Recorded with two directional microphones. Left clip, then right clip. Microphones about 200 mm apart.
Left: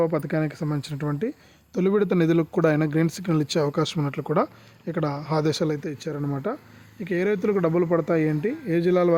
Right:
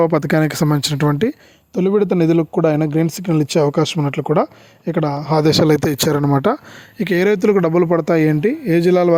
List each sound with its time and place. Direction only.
0.0 s speech: 50° right (ahead or behind)
1.7 s speech: 25° right (ahead or behind); by 5.7 s 40° right (ahead or behind)
5.7 s speech: 60° right (ahead or behind); by 9.1 s 40° right (ahead or behind)